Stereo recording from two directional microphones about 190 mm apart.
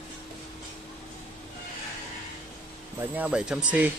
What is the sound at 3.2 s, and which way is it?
Speech, 5° right (ahead or behind).